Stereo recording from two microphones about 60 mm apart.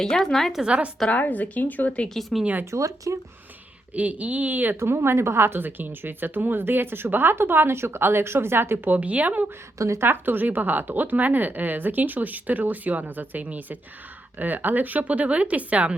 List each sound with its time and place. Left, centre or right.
0.0 s a woman's voice: centre
0.5 s a woman's voice: centre
1.1 s speech: left
2.0 s speech: centre
2.4 s speech: right
2.6 s speech: right
3.9 s speech: right
4.8 s speech: right
8.9 s speech: right
9.7 s speech: right
10.1 s speech: right